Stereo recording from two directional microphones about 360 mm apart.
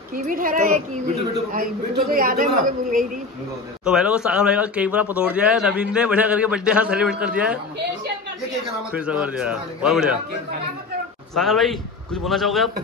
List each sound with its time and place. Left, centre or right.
0.1 s a man's voice: right
3.8 s speech: centre
8.9 s speech: centre
11.3 s speech: centre